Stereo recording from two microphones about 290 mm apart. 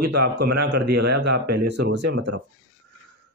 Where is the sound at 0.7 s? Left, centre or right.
Right.